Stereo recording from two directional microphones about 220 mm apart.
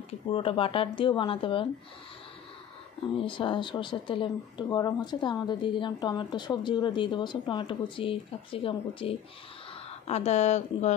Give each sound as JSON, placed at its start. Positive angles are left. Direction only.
{"t": 0.3, "sound": "speech", "side_deg": 25}
{"t": 3.2, "sound": "speech", "side_deg": 20}